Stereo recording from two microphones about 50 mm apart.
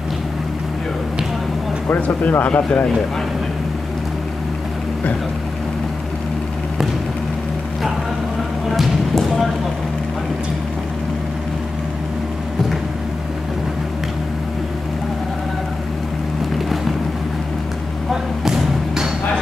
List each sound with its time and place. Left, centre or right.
1.9 s speech: left
8.7 s basketball bounce: centre
18.1 s thump: centre